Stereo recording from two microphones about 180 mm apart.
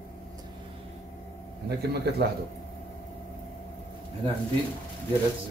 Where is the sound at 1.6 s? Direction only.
65° right (ahead or behind).